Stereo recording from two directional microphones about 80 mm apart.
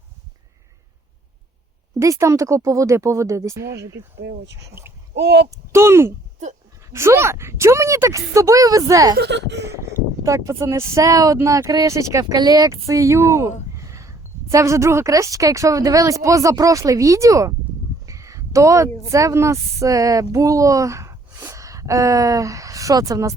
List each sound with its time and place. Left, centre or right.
2.0 s speech: right
12.4 s speech: right
12.6 s speech: right
18.0 s a sound: right
19.0 s speech: right